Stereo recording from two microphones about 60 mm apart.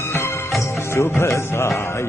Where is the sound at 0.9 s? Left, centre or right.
Left.